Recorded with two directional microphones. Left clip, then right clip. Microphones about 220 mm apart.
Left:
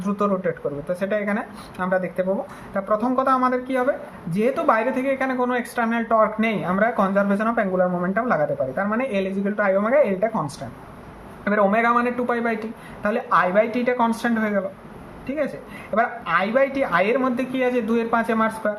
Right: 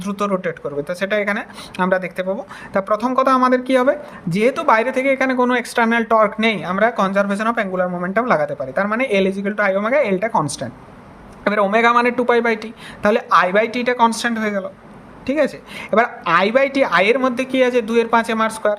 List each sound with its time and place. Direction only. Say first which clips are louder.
0.0 s speech: right 2 dB; 45° right (ahead or behind)